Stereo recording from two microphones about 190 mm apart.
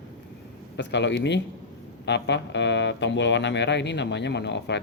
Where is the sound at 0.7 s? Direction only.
65° left (ahead or behind).